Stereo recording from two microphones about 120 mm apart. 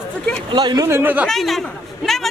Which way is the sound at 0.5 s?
35° right (ahead or behind).